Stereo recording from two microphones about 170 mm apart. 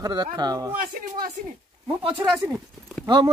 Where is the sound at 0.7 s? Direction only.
55° right (ahead or behind).